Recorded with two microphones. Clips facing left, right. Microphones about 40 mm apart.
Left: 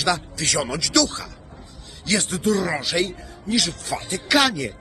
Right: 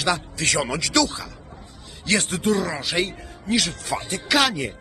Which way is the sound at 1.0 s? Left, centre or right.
Centre.